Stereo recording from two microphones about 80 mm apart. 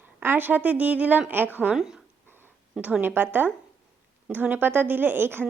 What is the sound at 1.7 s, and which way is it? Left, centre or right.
Speech, centre.